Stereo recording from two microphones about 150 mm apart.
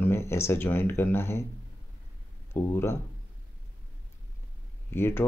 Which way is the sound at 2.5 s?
15° left (ahead or behind).